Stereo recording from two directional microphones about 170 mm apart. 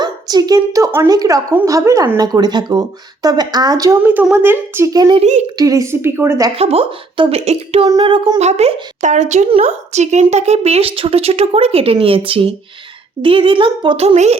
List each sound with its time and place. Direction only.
0.0 s a woman's voice: 25° right (ahead or behind)
6.6 s a woman's voice: 35° right (ahead or behind)